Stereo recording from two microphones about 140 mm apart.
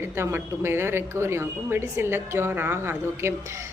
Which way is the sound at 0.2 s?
15° right (ahead or behind).